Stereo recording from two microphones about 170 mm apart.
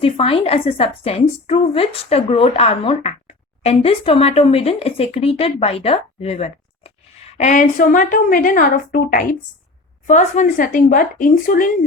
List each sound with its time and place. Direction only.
0.0 s a woman's voice: 35° left (ahead or behind); by 11.7 s 55° left (ahead or behind)